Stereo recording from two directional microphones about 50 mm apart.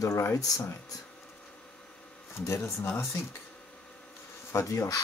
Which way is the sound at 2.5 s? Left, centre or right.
Left.